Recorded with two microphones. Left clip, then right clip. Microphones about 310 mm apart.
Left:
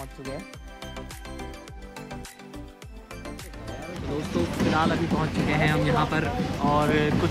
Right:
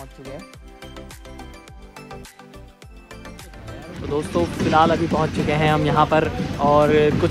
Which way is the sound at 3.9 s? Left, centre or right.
Left.